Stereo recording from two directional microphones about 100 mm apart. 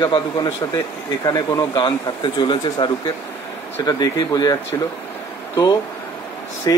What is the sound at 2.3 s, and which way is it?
Speech, 45° left (ahead or behind).